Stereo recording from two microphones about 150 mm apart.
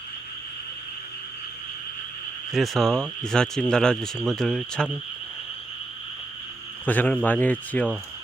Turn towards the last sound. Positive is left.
turn(degrees=10)  # may be behind; listen again after turning